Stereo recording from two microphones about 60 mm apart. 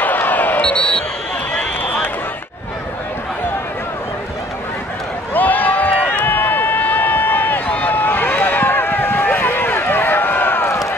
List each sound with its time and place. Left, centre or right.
0.0 s basketball bounce: left
0.7 s basketball bounce: centre
1.6 s run: left
5.3 s run: left